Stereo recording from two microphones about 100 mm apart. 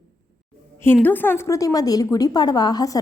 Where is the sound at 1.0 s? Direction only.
20° left (ahead or behind).